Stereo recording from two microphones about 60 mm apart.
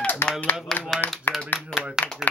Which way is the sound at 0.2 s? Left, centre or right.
Left.